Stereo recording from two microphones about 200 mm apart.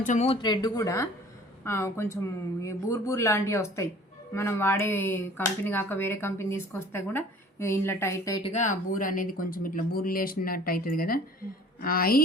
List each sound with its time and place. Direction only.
0.0 s speech: 35° left (ahead or behind)
0.4 s speech: 20° left (ahead or behind)
8.4 s speech: 35° left (ahead or behind)